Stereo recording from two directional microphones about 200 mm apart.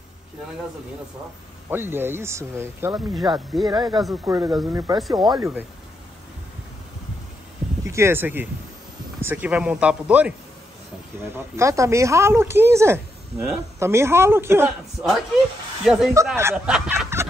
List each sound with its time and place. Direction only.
1.7 s speech: 10° right (ahead or behind)
7.8 s speech: 15° right (ahead or behind)
11.3 s speech: 15° right (ahead or behind)